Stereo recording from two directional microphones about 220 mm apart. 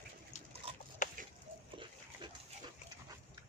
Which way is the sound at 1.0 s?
35° left (ahead or behind).